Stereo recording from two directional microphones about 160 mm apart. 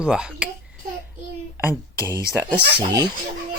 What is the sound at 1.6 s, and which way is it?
Speech, 15° right (ahead or behind).